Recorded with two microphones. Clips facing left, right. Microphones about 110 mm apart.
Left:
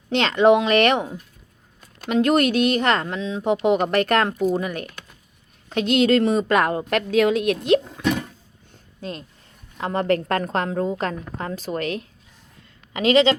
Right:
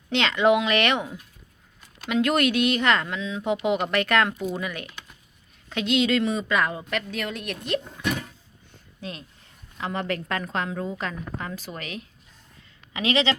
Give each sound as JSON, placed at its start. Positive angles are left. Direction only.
{"t": 0.1, "sound": "a woman's voice", "side_deg": 40}
{"t": 6.5, "sound": "speech", "side_deg": 55}
{"t": 7.1, "sound": "speech", "side_deg": 90}
{"t": 9.0, "sound": "a woman's voice", "side_deg": 40}